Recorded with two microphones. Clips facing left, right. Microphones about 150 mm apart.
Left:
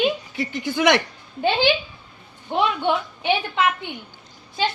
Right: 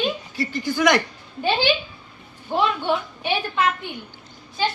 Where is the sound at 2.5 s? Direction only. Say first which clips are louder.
Left 1 dB; 20° left (ahead or behind).